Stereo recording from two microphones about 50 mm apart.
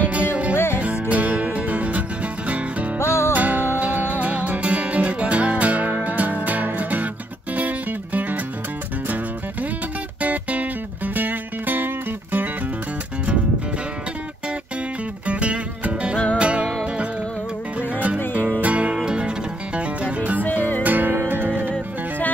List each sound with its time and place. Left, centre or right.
0.0 s music: right
3.0 s music: left
3.3 s music: right
10.2 s music: right
15.2 s music: right
18.6 s music: right
20.4 s music: left
20.8 s music: right
21.1 s music: right